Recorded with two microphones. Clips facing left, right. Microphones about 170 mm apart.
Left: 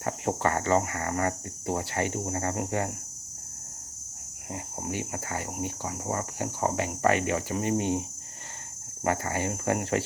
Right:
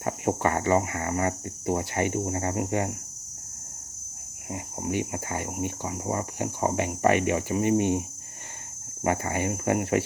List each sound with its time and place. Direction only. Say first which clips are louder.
0.0 s speech: right 2 dB; 15° right (ahead or behind)
4.5 s speech: right 4 dB; 15° right (ahead or behind)
9.0 s speech: right 2 dB; 15° right (ahead or behind)